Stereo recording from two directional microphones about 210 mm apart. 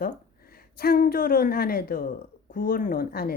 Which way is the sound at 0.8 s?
45° left (ahead or behind).